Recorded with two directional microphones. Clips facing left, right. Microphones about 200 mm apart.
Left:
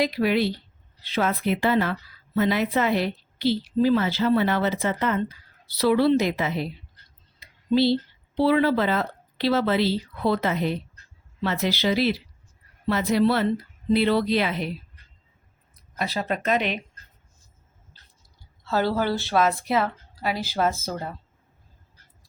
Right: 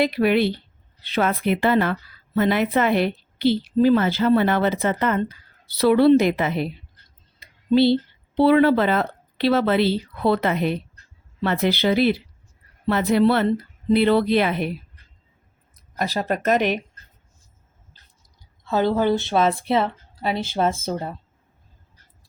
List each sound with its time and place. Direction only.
0.0 s a woman's voice: 60° right (ahead or behind)
7.3 s a sound: 55° right (ahead or behind)
8.4 s a woman's voice: 60° right (ahead or behind)
16.0 s a woman's voice: 45° right (ahead or behind)
18.6 s a woman's voice: 20° right (ahead or behind)